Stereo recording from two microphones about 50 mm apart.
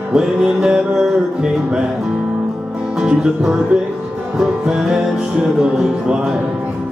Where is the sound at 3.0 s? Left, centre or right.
Centre.